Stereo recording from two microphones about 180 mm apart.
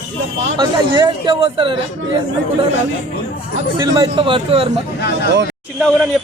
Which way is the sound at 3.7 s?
20° right (ahead or behind).